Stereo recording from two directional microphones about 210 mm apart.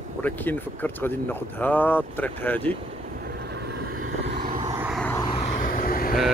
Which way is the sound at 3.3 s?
50° right (ahead or behind).